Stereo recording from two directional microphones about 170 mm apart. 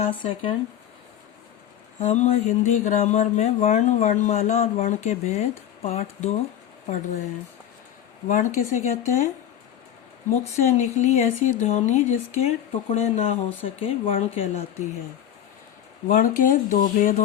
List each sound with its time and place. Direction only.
0.1 s speech: 30° left (ahead or behind)
2.0 s speech: 40° left (ahead or behind)
8.3 s speech: 45° left (ahead or behind)
10.6 s speech: 40° left (ahead or behind)
16.0 s speech: 55° left (ahead or behind)